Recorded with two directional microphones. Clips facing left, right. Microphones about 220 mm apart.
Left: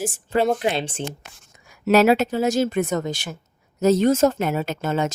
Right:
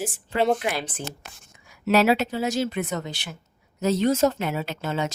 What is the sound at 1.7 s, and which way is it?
A woman's voice, 45° left (ahead or behind).